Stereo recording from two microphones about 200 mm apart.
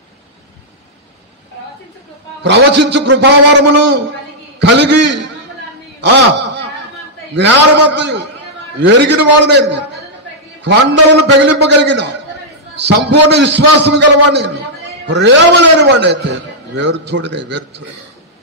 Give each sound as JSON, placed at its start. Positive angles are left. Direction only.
{"t": 2.4, "sound": "a man's voice", "side_deg": -60}
{"t": 5.9, "sound": "a sound", "side_deg": -60}
{"t": 7.3, "sound": "a man's voice", "side_deg": -60}